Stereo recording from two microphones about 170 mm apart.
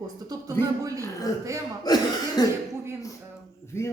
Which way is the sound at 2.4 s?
25° left (ahead or behind).